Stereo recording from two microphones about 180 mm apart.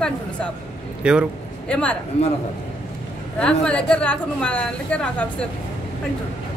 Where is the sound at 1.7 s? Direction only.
5° left (ahead or behind).